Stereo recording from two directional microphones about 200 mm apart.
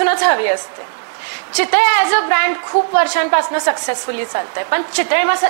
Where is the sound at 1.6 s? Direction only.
15° left (ahead or behind).